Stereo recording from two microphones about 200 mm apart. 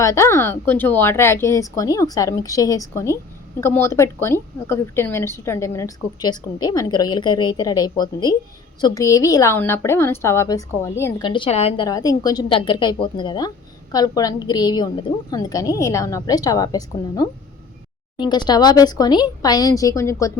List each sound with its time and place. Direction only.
0.0 s a woman's voice: 15° left (ahead or behind)
11.3 s speech: 25° left (ahead or behind)
11.9 s speech: 20° left (ahead or behind)